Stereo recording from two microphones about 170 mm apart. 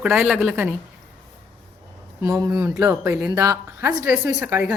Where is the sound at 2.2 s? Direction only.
20° right (ahead or behind).